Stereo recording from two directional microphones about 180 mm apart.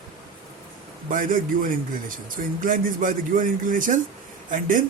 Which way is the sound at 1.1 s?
50° right (ahead or behind).